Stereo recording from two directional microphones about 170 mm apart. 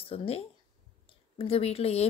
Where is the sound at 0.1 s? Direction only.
35° left (ahead or behind).